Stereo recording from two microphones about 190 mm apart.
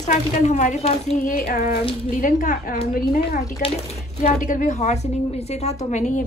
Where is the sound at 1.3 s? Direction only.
50° left (ahead or behind).